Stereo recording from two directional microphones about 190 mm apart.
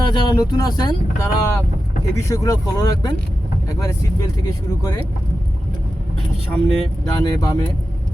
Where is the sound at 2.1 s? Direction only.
15° left (ahead or behind).